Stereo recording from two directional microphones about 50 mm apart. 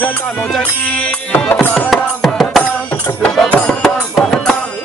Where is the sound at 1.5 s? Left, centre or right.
Left.